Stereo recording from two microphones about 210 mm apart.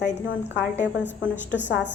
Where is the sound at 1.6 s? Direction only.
60° left (ahead or behind).